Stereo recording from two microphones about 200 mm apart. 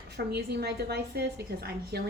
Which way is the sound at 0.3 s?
55° right (ahead or behind).